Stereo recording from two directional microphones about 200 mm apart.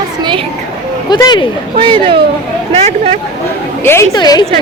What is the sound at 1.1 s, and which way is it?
Speech, 20° left (ahead or behind).